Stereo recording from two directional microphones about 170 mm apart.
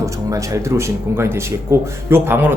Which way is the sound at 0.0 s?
20° right (ahead or behind).